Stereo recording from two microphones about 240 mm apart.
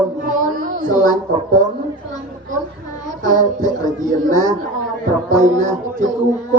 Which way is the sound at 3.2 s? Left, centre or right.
Right.